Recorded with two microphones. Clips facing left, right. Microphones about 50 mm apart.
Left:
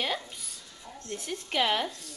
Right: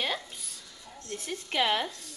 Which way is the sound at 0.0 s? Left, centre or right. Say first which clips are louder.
Even; centre.